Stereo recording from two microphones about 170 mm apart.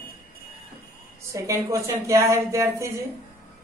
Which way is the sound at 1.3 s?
15° right (ahead or behind).